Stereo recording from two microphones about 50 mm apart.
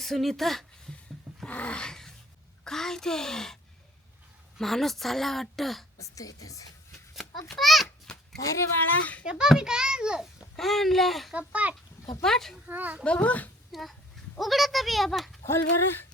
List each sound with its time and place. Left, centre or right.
0.0 s a woman's voice: centre
0.9 s roaring cats: centre
1.5 s dog: left; by 2.1 s centre
2.6 s a child's voice: centre
7.1 s a sound: centre
8.4 s speech: left
9.2 s a child's voice: centre
10.6 s a woman's voice: centre
11.3 s a child's voice: right
12.2 s a child's voice: centre
12.6 s a child's voice: right
13.1 s a child's voice: left
13.7 s a woman's voice: centre
15.4 s speech: left